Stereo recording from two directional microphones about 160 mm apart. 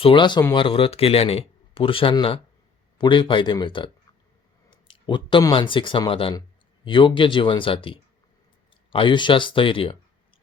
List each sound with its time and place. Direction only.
0.0 s speech: 30° left (ahead or behind)